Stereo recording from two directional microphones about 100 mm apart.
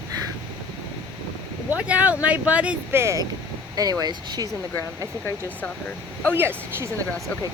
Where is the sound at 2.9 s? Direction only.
30° right (ahead or behind).